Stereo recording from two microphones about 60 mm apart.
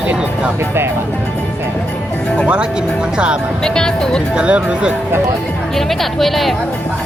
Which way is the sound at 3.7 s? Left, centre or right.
Centre.